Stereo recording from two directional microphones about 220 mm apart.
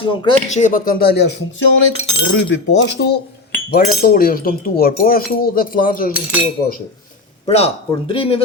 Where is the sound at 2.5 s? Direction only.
50° left (ahead or behind).